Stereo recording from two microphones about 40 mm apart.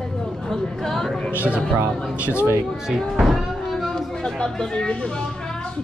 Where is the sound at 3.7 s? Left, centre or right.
Centre.